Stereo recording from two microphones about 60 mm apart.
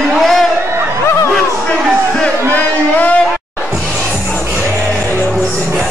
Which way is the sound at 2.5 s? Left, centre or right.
Left.